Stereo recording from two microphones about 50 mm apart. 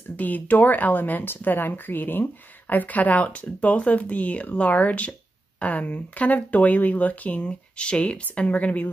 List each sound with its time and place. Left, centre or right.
0.1 s speech: left